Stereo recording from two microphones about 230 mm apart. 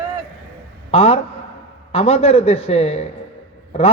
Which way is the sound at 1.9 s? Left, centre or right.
Left.